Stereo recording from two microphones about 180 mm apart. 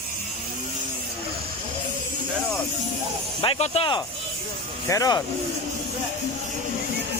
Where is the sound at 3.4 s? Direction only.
30° left (ahead or behind).